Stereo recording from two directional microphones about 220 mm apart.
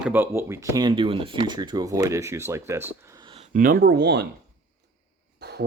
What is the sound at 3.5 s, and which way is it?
Speech, 40° right (ahead or behind).